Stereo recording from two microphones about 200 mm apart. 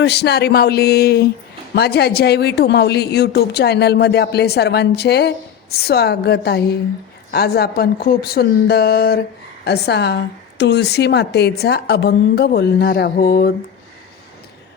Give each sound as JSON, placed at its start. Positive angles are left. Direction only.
{"t": 0.0, "sound": "a woman's voice", "side_deg": 55}